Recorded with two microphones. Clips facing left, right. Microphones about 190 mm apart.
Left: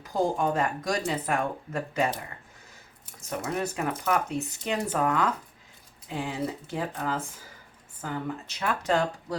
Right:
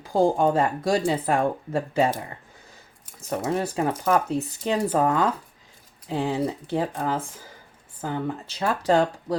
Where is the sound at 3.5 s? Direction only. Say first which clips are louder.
Right 5 dB; 30° right (ahead or behind).